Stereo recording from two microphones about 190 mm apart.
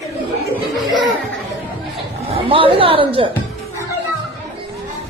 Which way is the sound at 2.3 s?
30° right (ahead or behind).